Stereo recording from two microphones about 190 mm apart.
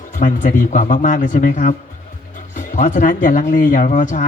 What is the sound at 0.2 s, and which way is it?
Speech, 45° left (ahead or behind).